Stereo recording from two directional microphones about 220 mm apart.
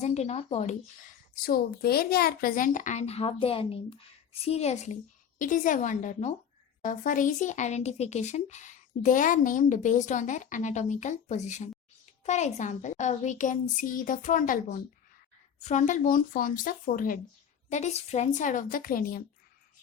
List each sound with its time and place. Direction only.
0.0 s speech: 30° left (ahead or behind)
1.5 s a woman's voice: 45° left (ahead or behind)